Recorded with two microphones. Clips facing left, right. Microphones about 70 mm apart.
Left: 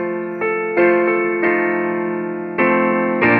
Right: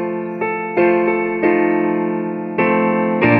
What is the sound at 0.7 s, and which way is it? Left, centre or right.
Music, left.